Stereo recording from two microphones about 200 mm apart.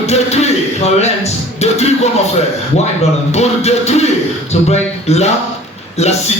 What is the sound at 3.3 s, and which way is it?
Music, 35° left (ahead or behind).